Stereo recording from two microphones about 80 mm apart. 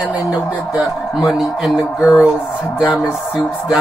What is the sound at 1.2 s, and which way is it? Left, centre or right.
Speech, centre.